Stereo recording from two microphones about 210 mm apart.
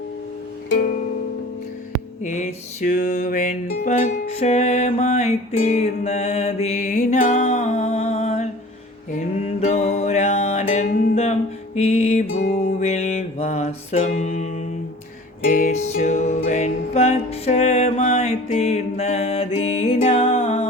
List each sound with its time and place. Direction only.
2.2 s mantra: 35° left (ahead or behind)
3.7 s music: 35° left (ahead or behind)
9.6 s music: 35° left (ahead or behind)